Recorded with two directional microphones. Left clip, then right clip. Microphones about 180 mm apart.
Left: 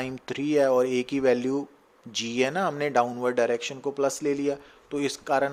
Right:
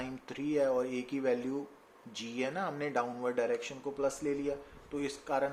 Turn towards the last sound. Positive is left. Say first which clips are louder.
# left 8 dB
turn(degrees=60)  # may be behind; listen again after turning